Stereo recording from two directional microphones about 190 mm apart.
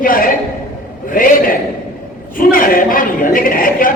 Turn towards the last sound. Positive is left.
turn(degrees=45)  # may be behind; listen again after turning